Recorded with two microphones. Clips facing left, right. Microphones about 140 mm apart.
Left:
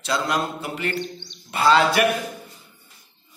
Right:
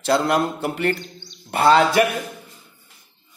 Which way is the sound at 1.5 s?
55° right (ahead or behind).